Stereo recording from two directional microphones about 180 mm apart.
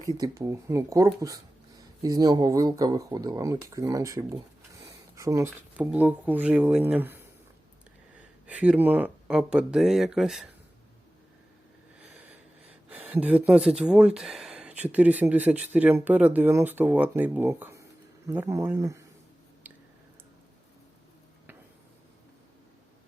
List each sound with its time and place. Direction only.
0.1 s speech: 20° right (ahead or behind)
8.4 s speech: 5° right (ahead or behind)
12.9 s speech: 10° right (ahead or behind)